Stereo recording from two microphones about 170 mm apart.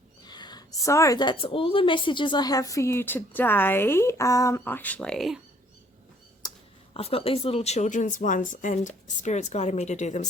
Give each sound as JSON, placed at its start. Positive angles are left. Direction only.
{"t": 0.3, "sound": "a woman's voice", "side_deg": 25}
{"t": 6.4, "sound": "a sound", "side_deg": 25}
{"t": 6.9, "sound": "speech", "side_deg": 35}